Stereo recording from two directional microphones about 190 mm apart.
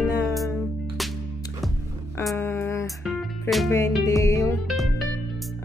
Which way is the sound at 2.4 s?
10° left (ahead or behind).